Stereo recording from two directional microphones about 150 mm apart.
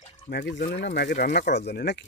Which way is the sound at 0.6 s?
75° left (ahead or behind).